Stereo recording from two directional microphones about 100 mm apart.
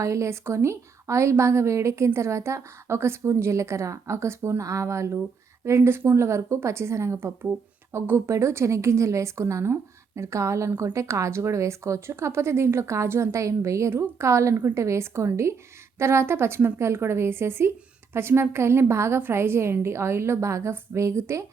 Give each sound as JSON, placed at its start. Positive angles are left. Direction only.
{"t": 0.0, "sound": "speech", "side_deg": -30}